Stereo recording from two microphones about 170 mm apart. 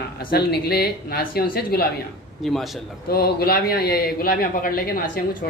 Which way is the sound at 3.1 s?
65° left (ahead or behind).